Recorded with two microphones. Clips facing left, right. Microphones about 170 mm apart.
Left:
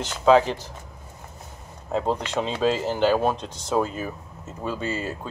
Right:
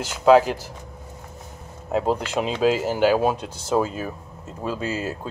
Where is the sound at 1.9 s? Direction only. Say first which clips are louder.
Right 2 dB; 10° right (ahead or behind).